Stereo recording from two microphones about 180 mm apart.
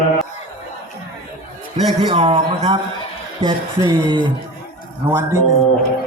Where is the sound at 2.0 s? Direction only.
30° right (ahead or behind).